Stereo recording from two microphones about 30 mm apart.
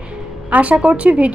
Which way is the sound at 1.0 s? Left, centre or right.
Right.